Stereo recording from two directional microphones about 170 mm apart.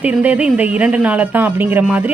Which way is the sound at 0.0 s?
10° right (ahead or behind).